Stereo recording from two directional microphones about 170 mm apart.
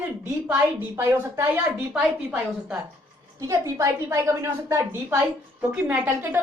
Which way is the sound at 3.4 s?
20° right (ahead or behind).